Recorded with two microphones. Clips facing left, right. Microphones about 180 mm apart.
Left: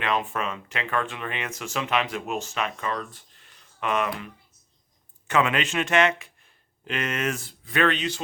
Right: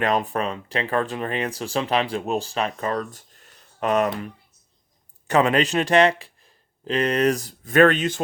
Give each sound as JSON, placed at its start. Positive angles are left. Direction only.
{"t": 0.0, "sound": "speech", "side_deg": -40}
{"t": 5.3, "sound": "speech", "side_deg": -35}